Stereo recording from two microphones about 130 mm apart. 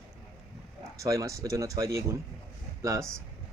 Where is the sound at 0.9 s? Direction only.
25° right (ahead or behind).